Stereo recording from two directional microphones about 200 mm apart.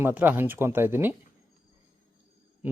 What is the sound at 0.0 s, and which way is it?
Speech, 10° right (ahead or behind).